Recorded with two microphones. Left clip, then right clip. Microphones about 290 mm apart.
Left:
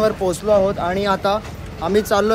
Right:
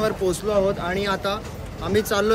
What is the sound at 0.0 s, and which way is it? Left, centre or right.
Speech, centre.